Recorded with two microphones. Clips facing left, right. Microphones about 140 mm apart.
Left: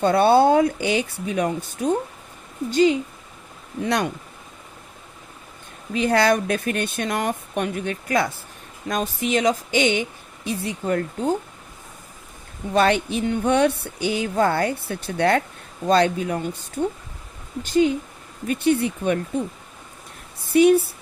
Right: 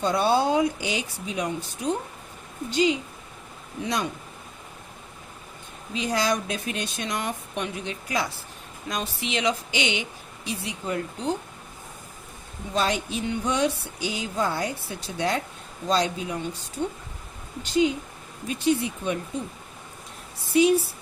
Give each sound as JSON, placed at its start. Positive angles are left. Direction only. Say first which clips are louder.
{"t": 0.0, "sound": "speech", "louder": "left 7 dB", "side_deg": 55}
{"t": 3.8, "sound": "speech", "louder": "left 5 dB", "side_deg": 65}
{"t": 5.9, "sound": "speech", "louder": "left 7 dB", "side_deg": 60}
{"t": 12.7, "sound": "speech", "louder": "left 7 dB", "side_deg": 60}
{"t": 17.7, "sound": "speech", "louder": "left 4 dB", "side_deg": 50}
{"t": 20.5, "sound": "speech", "louder": "left 5 dB", "side_deg": 55}